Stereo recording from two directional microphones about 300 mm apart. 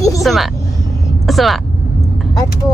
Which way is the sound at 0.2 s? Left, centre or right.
Centre.